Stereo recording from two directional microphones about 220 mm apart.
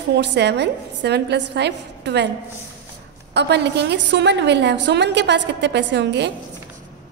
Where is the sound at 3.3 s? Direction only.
50° right (ahead or behind).